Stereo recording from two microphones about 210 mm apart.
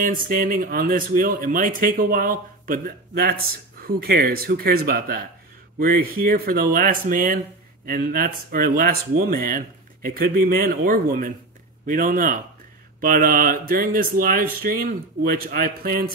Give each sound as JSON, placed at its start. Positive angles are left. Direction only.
{"t": 0.0, "sound": "speech", "side_deg": -40}